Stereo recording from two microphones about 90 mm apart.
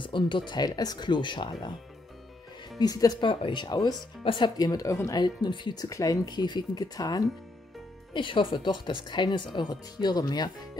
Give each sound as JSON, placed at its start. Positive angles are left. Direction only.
{"t": 0.0, "sound": "speech", "side_deg": 65}
{"t": 0.5, "sound": "speech", "side_deg": 50}
{"t": 2.8, "sound": "speech", "side_deg": 45}
{"t": 3.2, "sound": "speech", "side_deg": 65}
{"t": 4.2, "sound": "speech", "side_deg": 75}
{"t": 4.6, "sound": "speech", "side_deg": 45}
{"t": 5.9, "sound": "speech", "side_deg": 40}
{"t": 8.1, "sound": "speech", "side_deg": 65}